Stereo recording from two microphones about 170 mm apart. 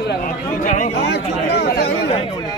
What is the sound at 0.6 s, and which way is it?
Speech, 45° left (ahead or behind).